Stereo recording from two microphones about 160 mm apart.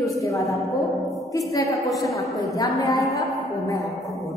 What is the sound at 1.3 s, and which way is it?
A woman's voice, 20° left (ahead or behind).